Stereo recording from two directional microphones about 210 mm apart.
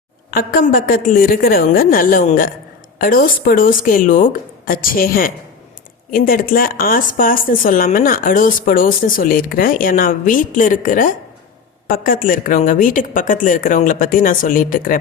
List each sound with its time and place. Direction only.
0.3 s a woman's voice: 45° left (ahead or behind)